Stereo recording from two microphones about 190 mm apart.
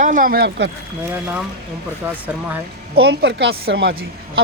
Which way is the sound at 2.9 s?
60° right (ahead or behind).